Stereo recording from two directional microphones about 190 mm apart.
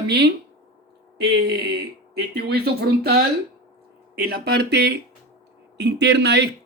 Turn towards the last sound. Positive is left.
turn(degrees=-60)  # may be behind; listen again after turning